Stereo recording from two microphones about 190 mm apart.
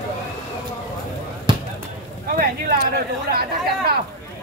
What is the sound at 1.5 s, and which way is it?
Basketball bounce, 25° right (ahead or behind).